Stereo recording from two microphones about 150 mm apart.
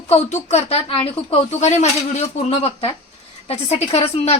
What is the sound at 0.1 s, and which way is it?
Speech, 45° left (ahead or behind).